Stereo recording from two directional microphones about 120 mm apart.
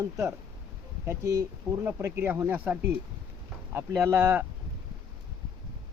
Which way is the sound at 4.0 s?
20° right (ahead or behind).